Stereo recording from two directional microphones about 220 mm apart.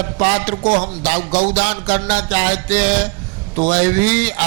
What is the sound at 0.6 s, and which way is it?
Music, 35° right (ahead or behind).